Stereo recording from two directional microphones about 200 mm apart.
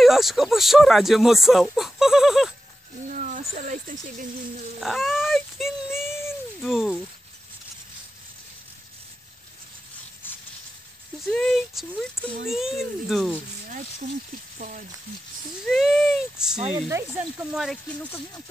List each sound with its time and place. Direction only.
0.0 s speech: centre (ahead or behind)
3.1 s speech: 40° right (ahead or behind)
4.7 s a sound: centre (ahead or behind)
6.6 s speech: centre (ahead or behind)
11.2 s speech: centre (ahead or behind)
14.6 s speech: 40° right (ahead or behind)
15.6 s speech: centre (ahead or behind)